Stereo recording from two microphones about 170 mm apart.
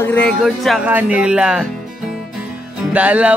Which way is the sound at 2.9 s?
10° right (ahead or behind).